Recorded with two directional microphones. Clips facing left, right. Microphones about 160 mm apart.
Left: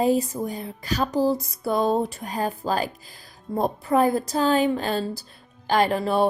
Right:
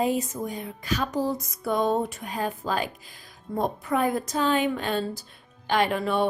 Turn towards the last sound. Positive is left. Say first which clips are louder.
# left 3 dB
turn(degrees=35)  # may be behind; listen again after turning